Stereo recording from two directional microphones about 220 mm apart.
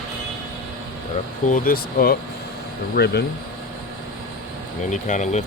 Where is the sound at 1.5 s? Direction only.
40° left (ahead or behind).